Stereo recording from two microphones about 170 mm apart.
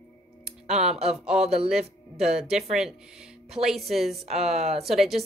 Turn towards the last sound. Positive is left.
turn(degrees=0)  # may be behind; listen again after turning